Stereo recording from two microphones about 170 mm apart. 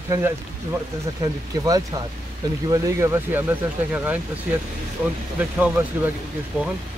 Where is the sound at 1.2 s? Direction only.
20° right (ahead or behind).